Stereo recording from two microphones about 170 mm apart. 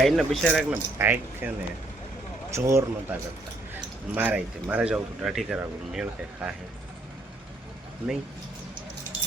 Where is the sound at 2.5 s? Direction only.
15° right (ahead or behind).